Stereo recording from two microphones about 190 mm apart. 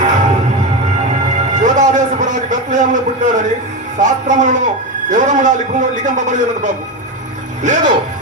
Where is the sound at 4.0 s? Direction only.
40° right (ahead or behind).